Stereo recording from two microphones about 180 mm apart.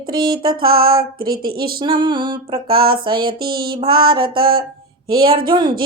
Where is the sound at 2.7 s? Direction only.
55° right (ahead or behind).